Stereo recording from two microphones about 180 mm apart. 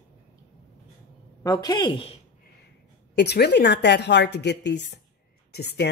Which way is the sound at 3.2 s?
70° left (ahead or behind).